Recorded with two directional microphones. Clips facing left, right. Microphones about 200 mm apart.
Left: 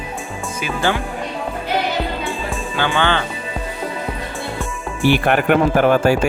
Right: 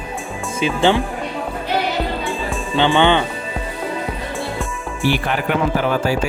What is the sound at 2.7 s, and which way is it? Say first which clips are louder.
Speech: right 5 dB; 20° right (ahead or behind).